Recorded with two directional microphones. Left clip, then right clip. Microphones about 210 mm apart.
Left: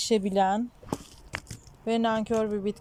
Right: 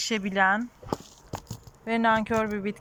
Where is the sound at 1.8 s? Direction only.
10° left (ahead or behind).